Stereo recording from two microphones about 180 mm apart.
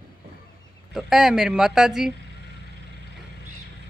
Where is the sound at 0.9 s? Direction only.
Centre (ahead or behind).